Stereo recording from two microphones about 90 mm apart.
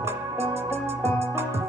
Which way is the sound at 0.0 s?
30° right (ahead or behind).